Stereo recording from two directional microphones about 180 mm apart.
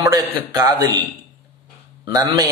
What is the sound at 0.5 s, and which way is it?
Speech, 20° right (ahead or behind).